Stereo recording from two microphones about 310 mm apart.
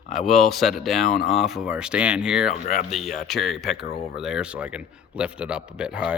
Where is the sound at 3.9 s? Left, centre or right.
Left.